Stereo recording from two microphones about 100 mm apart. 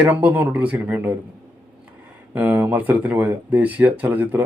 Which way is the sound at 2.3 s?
20° right (ahead or behind).